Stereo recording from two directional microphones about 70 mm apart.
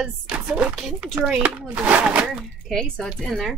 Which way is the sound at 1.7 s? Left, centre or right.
Centre.